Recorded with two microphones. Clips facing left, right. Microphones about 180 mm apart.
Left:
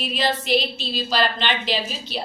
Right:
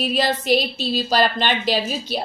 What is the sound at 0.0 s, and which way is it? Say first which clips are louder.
A woman's voice: right 3 dB; 45° right (ahead or behind).